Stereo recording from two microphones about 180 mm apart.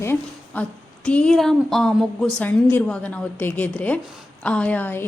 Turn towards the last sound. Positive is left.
turn(degrees=10)  # may be behind; listen again after turning